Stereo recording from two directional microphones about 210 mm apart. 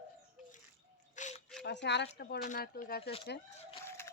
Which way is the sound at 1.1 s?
35° left (ahead or behind).